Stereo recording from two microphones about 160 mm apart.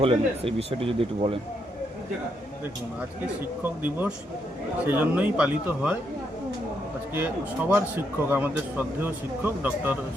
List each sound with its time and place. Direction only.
0.0 s speech: 35° right (ahead or behind)
3.6 s a man's voice: 10° right (ahead or behind)
7.1 s a man's voice: 10° right (ahead or behind)